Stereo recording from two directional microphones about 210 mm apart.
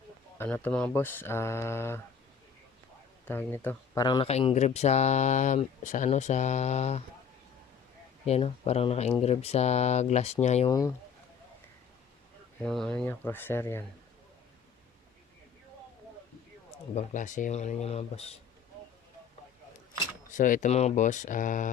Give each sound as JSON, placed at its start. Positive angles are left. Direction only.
{"t": 0.3, "sound": "speech", "side_deg": 10}
{"t": 3.2, "sound": "speech", "side_deg": 10}
{"t": 4.0, "sound": "speech", "side_deg": 25}
{"t": 8.3, "sound": "speech", "side_deg": 30}
{"t": 10.7, "sound": "speech", "side_deg": 15}
{"t": 12.6, "sound": "speech", "side_deg": 5}
{"t": 16.7, "sound": "speech", "side_deg": 30}
{"t": 20.3, "sound": "speech", "side_deg": 40}